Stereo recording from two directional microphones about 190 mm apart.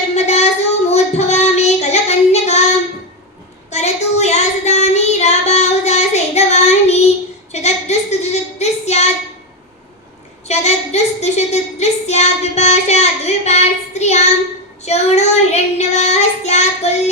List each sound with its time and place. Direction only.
0.1 s child singing: 35° left (ahead or behind)
3.7 s child singing: 35° left (ahead or behind)
7.5 s a sound: 35° left (ahead or behind)
10.5 s child singing: 35° left (ahead or behind)